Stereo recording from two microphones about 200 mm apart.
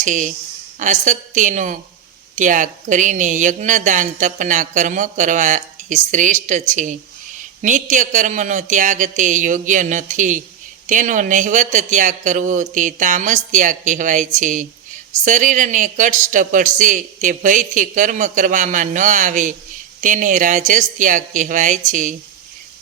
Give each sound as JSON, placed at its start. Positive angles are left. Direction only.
{"t": 0.0, "sound": "speech", "side_deg": -40}